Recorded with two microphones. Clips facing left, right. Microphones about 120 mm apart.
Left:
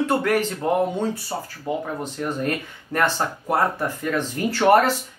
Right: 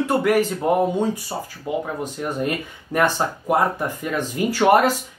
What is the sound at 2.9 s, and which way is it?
Speech, 15° right (ahead or behind).